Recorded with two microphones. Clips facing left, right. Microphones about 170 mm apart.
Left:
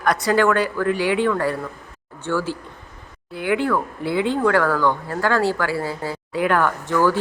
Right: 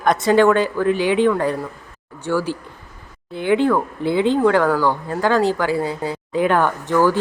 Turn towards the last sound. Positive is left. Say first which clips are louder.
# right 2 dB
turn(degrees=-15)  # may be behind; listen again after turning